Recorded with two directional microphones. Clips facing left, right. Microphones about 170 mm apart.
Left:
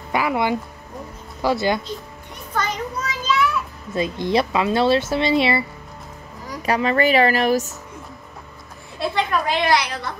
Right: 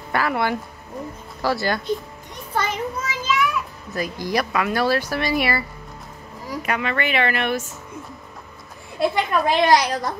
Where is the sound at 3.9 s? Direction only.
25° left (ahead or behind).